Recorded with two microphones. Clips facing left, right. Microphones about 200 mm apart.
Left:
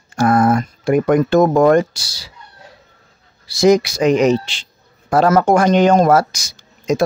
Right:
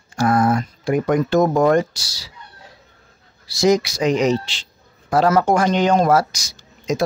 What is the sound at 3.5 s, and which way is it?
Speech, 55° left (ahead or behind).